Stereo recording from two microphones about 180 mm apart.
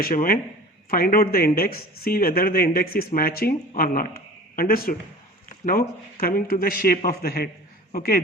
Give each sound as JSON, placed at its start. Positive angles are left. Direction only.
{"t": 0.0, "sound": "a man's voice", "side_deg": 55}